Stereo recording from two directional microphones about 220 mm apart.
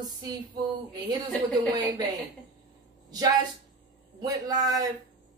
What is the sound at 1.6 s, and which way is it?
Speech, 20° right (ahead or behind).